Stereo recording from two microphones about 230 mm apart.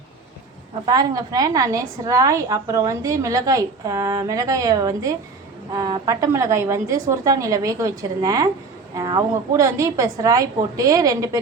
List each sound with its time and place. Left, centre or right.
0.9 s a woman's voice: centre